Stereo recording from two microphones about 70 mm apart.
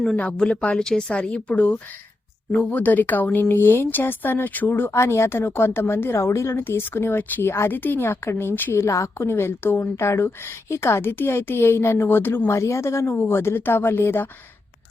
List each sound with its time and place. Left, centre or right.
0.2 s speech: centre; by 8.8 s left
8.8 s speech: left
12.5 s a woman's voice: left
13.1 s speech: left